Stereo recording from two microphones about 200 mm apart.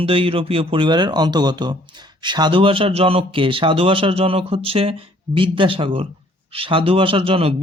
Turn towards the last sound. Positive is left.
turn(degrees=-30)  # may be behind; listen again after turning